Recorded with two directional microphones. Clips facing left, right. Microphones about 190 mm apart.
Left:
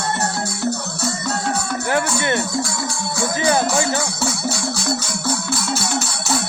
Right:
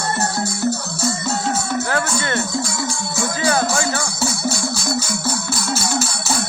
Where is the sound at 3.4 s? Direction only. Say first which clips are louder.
Left 1 dB; 20° left (ahead or behind).